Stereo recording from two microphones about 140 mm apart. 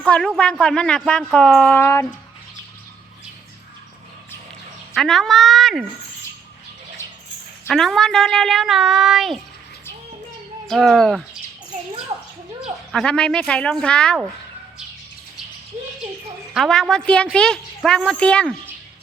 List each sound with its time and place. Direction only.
0.0 s a woman's voice: 5° left (ahead or behind)
4.9 s speech: 5° left (ahead or behind)
7.7 s speech: centre (ahead or behind)
10.7 s speech: centre (ahead or behind)
12.9 s a woman's voice: 5° left (ahead or behind)
16.6 s a woman's voice: 5° left (ahead or behind)